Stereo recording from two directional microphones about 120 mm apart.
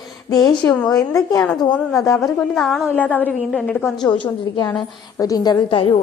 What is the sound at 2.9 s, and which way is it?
Speech, 15° left (ahead or behind).